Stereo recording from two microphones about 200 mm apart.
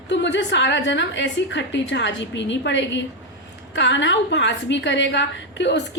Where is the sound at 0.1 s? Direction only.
65° left (ahead or behind).